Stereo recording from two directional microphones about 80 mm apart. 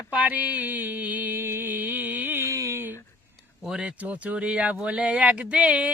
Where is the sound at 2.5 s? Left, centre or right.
Right.